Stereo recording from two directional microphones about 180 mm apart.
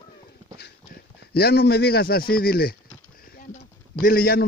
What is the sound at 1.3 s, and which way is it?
Speech, 60° left (ahead or behind).